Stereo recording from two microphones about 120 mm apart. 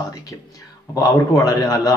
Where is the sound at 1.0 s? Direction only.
30° left (ahead or behind).